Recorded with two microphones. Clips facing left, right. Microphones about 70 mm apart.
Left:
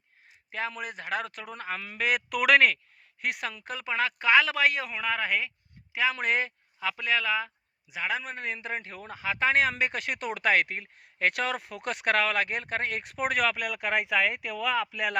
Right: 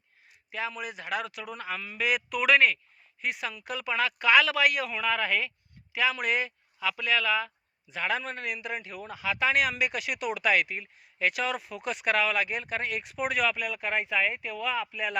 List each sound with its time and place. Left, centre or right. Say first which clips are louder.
0.5 s a man's voice: left 1 dB; left
3.2 s speech: left 1 dB; left
3.6 s a man's voice: right 1 dB; left
6.7 s a man's voice: even; left; by 8.4 s centre
8.4 s a man's voice: left 1 dB; left